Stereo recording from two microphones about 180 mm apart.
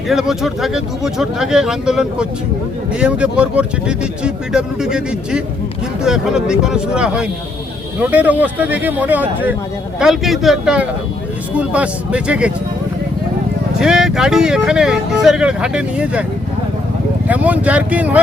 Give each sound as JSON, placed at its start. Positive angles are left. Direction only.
{"t": 0.1, "sound": "speech", "side_deg": 0}
{"t": 13.7, "sound": "speech", "side_deg": -5}
{"t": 17.2, "sound": "speech", "side_deg": -10}